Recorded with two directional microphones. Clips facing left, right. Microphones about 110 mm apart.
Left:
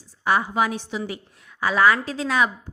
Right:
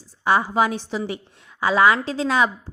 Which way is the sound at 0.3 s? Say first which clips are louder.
Right 2 dB; 30° right (ahead or behind).